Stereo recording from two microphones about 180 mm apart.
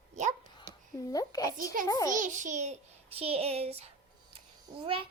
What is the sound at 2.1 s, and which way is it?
A child's voice, 45° right (ahead or behind).